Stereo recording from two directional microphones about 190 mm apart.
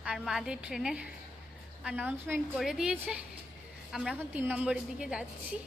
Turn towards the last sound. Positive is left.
turn(degrees=-5)  # may be behind; listen again after turning